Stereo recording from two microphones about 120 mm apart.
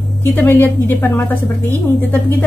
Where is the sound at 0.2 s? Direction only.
15° left (ahead or behind).